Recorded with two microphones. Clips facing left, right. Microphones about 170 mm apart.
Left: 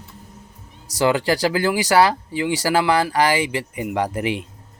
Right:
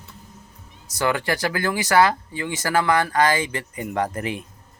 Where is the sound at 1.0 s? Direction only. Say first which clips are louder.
Left 5 dB; 15° left (ahead or behind).